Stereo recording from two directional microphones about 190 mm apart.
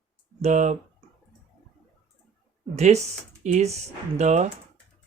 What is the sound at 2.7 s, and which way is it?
Speech, 35° right (ahead or behind).